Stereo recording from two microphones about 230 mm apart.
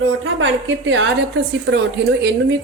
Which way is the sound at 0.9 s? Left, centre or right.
Right.